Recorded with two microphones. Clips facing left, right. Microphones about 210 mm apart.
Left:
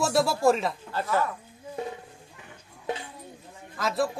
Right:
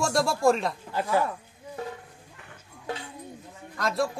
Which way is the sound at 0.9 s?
15° right (ahead or behind).